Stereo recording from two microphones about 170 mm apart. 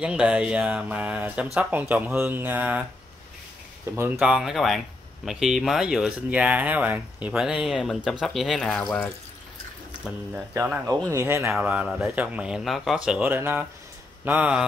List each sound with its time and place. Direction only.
0.0 s speech: 5° right (ahead or behind)
3.9 s speech: 15° right (ahead or behind)
4.2 s speech: 5° right (ahead or behind)
10.5 s speech: 15° right (ahead or behind)